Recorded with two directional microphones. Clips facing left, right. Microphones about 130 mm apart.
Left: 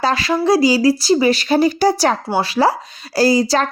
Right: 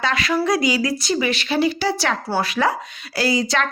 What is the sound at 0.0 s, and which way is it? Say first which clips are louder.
A woman's voice: left 4 dB; 30° left (ahead or behind).